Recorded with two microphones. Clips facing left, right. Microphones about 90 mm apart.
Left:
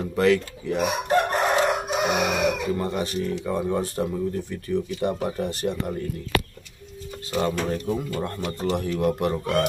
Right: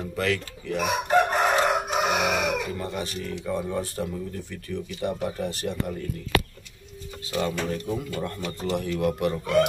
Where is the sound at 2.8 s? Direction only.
30° left (ahead or behind).